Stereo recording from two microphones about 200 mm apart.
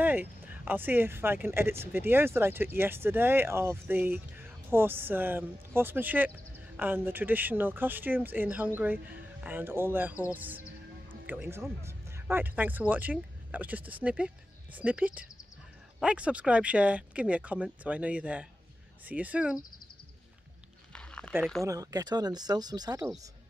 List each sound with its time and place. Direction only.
0.0 s speech: 10° right (ahead or behind)
20.9 s a sound: 5° left (ahead or behind)
21.6 s speech: 20° right (ahead or behind)